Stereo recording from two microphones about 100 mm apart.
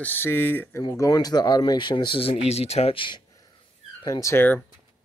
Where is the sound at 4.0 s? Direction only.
35° left (ahead or behind).